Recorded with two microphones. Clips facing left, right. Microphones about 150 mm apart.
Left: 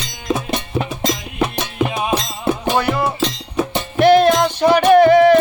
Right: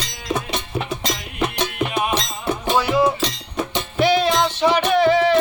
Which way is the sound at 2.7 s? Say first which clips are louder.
Even; 55° left (ahead or behind).